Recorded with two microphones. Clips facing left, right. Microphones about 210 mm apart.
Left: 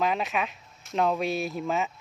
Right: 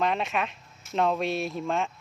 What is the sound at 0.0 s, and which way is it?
Speech, centre (ahead or behind).